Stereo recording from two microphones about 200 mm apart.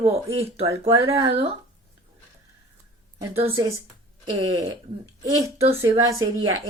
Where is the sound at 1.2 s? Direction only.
30° right (ahead or behind).